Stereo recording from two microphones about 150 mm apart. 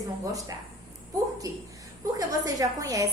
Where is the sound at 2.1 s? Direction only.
25° right (ahead or behind).